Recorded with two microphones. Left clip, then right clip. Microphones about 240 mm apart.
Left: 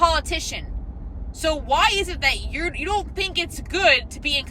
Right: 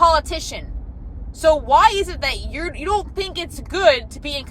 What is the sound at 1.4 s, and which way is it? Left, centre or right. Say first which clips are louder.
Speech: right 6 dB; right.